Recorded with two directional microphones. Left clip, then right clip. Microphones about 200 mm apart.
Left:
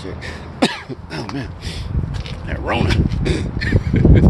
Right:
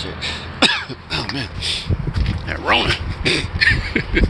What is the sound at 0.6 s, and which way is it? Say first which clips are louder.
Cough: right 4 dB; 40° left (ahead or behind).